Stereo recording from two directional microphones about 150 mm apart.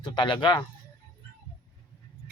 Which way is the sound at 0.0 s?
30° left (ahead or behind).